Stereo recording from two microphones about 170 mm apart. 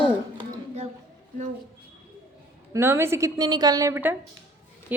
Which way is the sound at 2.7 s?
15° right (ahead or behind).